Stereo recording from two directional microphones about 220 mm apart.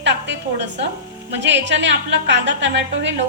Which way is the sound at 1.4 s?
55° right (ahead or behind).